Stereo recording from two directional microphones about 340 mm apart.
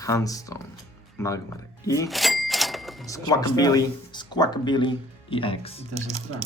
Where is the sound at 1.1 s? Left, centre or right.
Centre.